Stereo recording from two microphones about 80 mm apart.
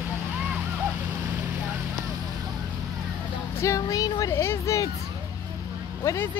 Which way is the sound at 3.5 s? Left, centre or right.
Left.